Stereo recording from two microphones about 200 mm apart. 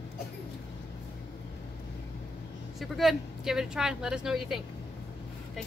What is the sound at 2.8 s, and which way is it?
Speech, centre (ahead or behind).